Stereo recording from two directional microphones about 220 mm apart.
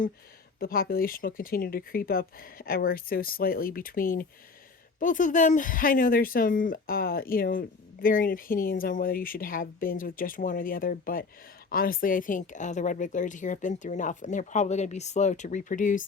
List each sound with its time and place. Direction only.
0.6 s a woman's voice: 40° left (ahead or behind)